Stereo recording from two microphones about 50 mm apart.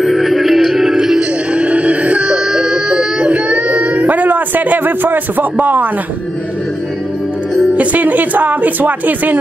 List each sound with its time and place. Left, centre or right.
0.0 s music: centre
1.5 s wail: right
7.7 s speech: right